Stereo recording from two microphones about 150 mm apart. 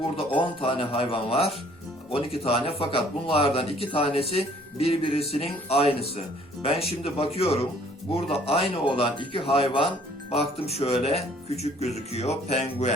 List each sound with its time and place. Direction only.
0.2 s speech: 35° left (ahead or behind)